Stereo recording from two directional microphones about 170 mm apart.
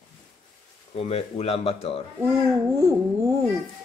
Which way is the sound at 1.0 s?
35° left (ahead or behind).